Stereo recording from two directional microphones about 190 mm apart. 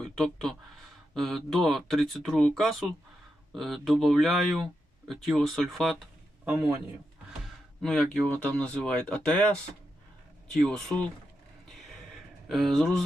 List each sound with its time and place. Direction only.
0.0 s speech: centre (ahead or behind)
10.5 s speech: centre (ahead or behind)
11.7 s a sound: centre (ahead or behind)